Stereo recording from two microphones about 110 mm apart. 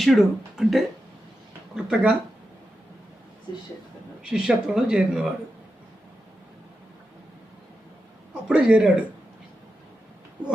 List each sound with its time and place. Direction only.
0.0 s speech: centre (ahead or behind)
4.2 s speech: 10° right (ahead or behind)
8.4 s speech: 5° right (ahead or behind)